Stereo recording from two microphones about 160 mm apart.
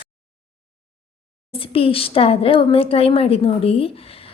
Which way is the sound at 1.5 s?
35° left (ahead or behind).